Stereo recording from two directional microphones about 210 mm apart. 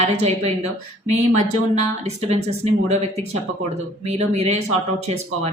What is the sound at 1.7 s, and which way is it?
A woman's voice, 30° right (ahead or behind).